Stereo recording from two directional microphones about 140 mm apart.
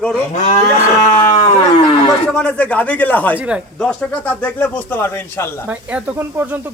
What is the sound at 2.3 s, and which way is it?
Speech, 5° left (ahead or behind).